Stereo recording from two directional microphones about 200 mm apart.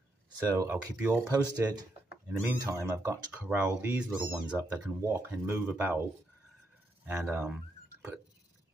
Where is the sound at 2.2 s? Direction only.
10° right (ahead or behind).